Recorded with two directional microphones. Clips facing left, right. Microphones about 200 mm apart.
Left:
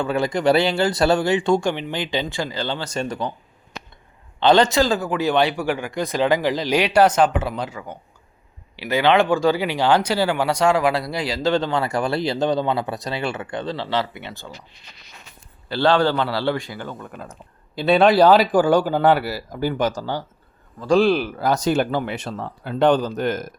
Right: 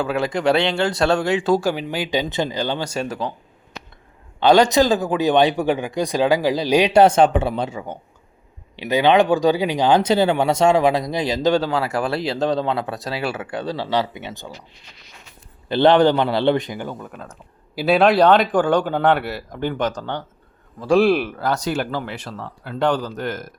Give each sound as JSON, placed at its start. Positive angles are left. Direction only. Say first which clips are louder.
{"t": 0.0, "sound": "speech", "louder": "even", "side_deg": 0}
{"t": 4.4, "sound": "speech", "louder": "right 2 dB", "side_deg": -10}
{"t": 15.7, "sound": "a man's voice", "louder": "right 4 dB", "side_deg": -20}
{"t": 20.7, "sound": "speech", "louder": "right 1 dB", "side_deg": -5}
{"t": 21.3, "sound": "speech", "louder": "left 3 dB", "side_deg": 15}